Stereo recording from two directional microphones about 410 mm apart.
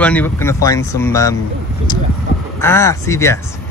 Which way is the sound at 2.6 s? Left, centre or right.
Centre.